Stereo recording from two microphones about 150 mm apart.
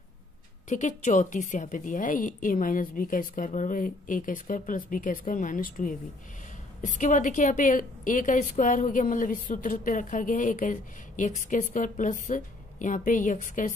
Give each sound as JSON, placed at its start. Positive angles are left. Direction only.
{"t": 0.7, "sound": "a woman's voice", "side_deg": 55}